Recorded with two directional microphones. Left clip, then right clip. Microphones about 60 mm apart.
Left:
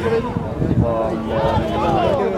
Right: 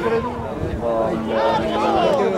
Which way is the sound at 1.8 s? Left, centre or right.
Right.